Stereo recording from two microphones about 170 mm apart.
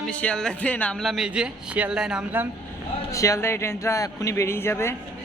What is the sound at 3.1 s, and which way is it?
A man's voice, 20° left (ahead or behind).